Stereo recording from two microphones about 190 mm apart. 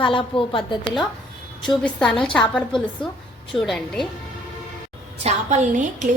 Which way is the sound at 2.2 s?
5° left (ahead or behind).